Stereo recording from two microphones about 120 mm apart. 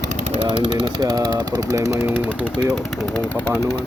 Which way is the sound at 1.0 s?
30° right (ahead or behind).